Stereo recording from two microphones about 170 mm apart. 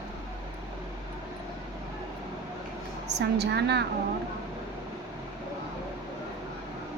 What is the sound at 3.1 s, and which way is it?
Speech, 80° right.